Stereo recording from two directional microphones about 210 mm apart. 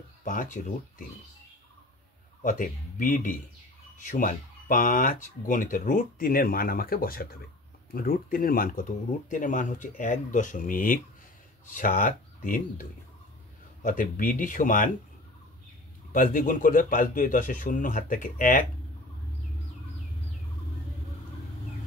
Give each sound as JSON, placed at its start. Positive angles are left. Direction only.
{"t": 0.2, "sound": "speech", "side_deg": 40}
{"t": 2.4, "sound": "speech", "side_deg": 40}
{"t": 13.8, "sound": "speech", "side_deg": 40}
{"t": 16.1, "sound": "speech", "side_deg": 40}